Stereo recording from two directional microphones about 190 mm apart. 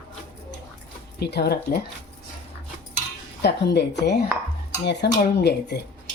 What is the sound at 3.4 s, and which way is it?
A woman's voice, 60° left (ahead or behind).